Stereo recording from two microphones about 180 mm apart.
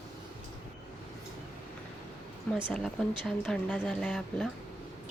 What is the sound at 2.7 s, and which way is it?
Speech, 5° left (ahead or behind).